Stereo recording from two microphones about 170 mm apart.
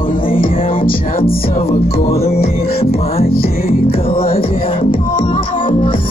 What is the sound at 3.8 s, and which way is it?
Music, 35° left (ahead or behind).